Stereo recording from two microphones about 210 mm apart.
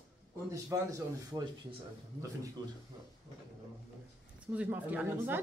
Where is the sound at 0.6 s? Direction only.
15° right (ahead or behind).